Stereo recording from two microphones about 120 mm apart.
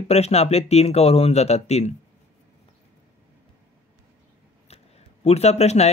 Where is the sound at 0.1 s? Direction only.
60° left (ahead or behind).